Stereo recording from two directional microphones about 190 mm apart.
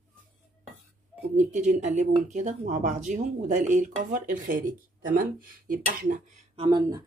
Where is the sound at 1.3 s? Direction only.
40° right (ahead or behind).